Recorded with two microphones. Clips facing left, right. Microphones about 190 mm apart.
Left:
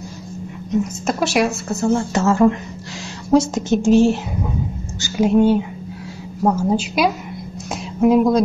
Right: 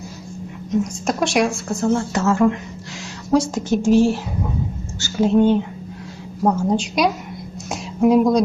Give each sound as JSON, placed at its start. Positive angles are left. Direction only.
{"t": 0.7, "sound": "speech", "side_deg": 0}
{"t": 2.0, "sound": "a woman's voice", "side_deg": 25}